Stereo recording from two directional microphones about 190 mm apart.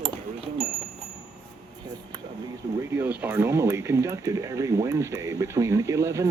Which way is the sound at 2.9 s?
10° right (ahead or behind).